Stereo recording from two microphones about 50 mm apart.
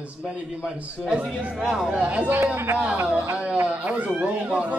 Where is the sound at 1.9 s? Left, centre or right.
Right.